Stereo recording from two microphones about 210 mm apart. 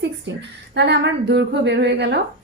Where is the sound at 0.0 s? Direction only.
55° right (ahead or behind).